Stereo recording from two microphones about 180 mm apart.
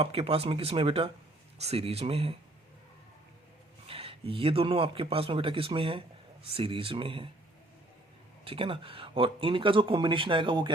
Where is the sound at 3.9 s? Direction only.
30° right (ahead or behind).